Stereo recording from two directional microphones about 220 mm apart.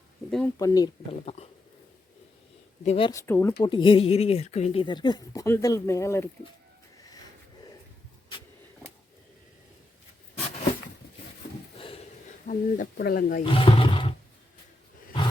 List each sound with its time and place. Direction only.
0.3 s speech: centre (ahead or behind)
0.6 s speech: 15° left (ahead or behind)
1.2 s speech: 30° left (ahead or behind)
2.8 s speech: 25° left (ahead or behind)
3.1 s speech: 10° left (ahead or behind)
3.6 s speech: 20° left (ahead or behind)
12.5 s speech: 40° left (ahead or behind)
13.4 s speech: 25° left (ahead or behind)